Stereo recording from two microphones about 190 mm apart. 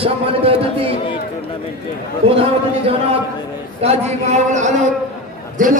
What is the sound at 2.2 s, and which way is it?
A man's voice, 30° right (ahead or behind).